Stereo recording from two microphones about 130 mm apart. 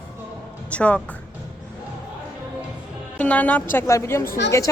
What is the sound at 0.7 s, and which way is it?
Speech, 10° left (ahead or behind).